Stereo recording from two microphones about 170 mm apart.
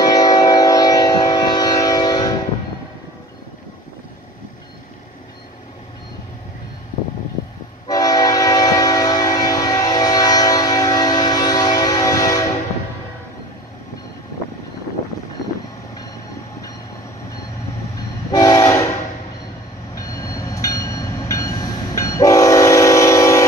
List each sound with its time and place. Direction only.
0.1 s train: 25° left (ahead or behind)
7.9 s train: 20° left (ahead or behind)
18.3 s train: 20° left (ahead or behind)
20.1 s train: 20° left (ahead or behind)